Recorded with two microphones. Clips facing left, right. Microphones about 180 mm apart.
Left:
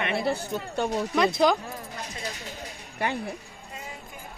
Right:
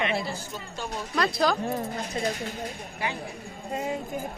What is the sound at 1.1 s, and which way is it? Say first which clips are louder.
Speech: left 2 dB; 20° left (ahead or behind).